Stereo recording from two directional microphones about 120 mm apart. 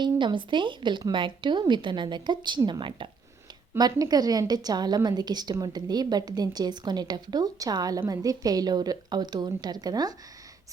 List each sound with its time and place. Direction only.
0.0 s a woman's voice: 40° right (ahead or behind)